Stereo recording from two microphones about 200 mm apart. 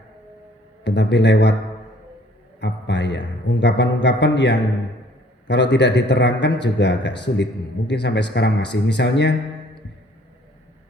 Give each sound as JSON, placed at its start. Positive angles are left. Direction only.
{"t": 0.9, "sound": "a man's voice", "side_deg": 60}
{"t": 2.6, "sound": "a man's voice", "side_deg": 60}